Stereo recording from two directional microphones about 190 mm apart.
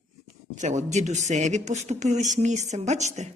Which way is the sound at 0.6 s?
40° right (ahead or behind).